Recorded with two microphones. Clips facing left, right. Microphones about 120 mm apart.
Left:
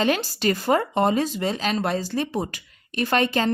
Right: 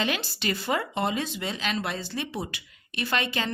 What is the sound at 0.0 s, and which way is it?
Speech, 40° left (ahead or behind).